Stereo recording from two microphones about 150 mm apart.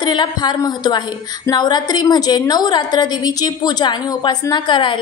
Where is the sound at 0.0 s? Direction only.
30° left (ahead or behind).